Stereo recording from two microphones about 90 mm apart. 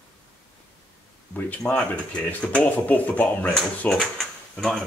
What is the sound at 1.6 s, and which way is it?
Speech, 10° left (ahead or behind).